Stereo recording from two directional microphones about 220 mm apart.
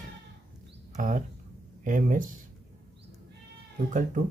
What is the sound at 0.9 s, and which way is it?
Speech, 35° right (ahead or behind).